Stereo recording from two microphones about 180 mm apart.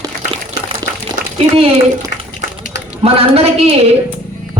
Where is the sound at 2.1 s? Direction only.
65° left (ahead or behind).